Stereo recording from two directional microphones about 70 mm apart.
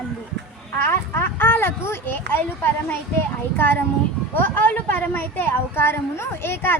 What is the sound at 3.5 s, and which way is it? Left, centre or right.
Speech, left.